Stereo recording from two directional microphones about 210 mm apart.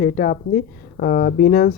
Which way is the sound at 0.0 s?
40° left (ahead or behind).